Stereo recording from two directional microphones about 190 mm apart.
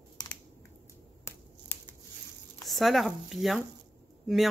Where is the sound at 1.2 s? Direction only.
10° left (ahead or behind).